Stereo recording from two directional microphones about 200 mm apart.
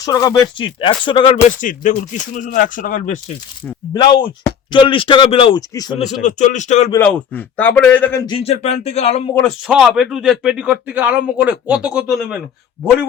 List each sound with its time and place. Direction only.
0.0 s speech: 20° left (ahead or behind)
1.5 s speech: 40° left (ahead or behind)
3.9 s speech: 20° left (ahead or behind)
6.2 s speech: 35° left (ahead or behind)
6.9 s a man's voice: 10° left (ahead or behind)
8.3 s speech: 30° left (ahead or behind)
9.6 s speech: centre (ahead or behind)